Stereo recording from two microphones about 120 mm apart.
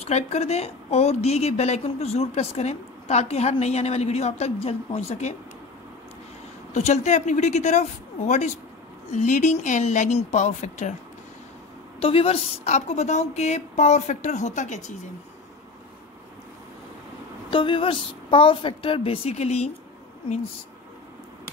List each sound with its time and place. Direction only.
0.0 s a woman's voice: 65° left (ahead or behind)
6.7 s a woman's voice: 70° left (ahead or behind)
9.1 s a woman's voice: 85° left
12.0 s a woman's voice: 50° left (ahead or behind); by 14.9 s 80° left
17.5 s a woman's voice: 45° left (ahead or behind); by 19.7 s 65° left (ahead or behind)